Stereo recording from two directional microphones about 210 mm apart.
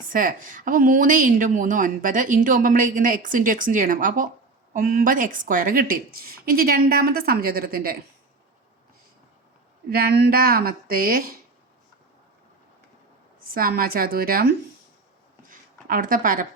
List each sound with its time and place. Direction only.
0.1 s a woman's voice: 40° right (ahead or behind)
9.9 s speech: 45° right (ahead or behind)
13.5 s speech: 45° right (ahead or behind)
15.4 s a sound: 40° right (ahead or behind)